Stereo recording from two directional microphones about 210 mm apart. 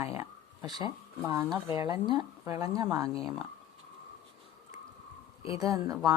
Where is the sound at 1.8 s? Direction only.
20° right (ahead or behind).